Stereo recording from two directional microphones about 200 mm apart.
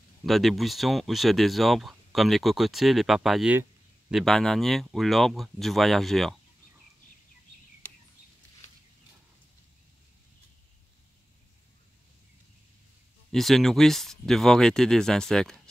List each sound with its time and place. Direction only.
0.2 s speech: centre (ahead or behind)
13.3 s speech: centre (ahead or behind)